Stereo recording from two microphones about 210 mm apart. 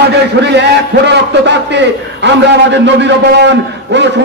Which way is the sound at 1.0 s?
55° right (ahead or behind).